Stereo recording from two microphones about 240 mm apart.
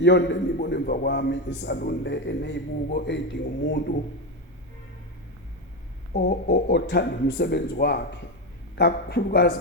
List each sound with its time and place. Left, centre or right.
0.0 s a man's voice: left
6.1 s a man's voice: left